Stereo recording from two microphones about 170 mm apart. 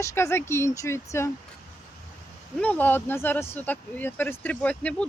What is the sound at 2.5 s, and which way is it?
Speech, 10° left (ahead or behind).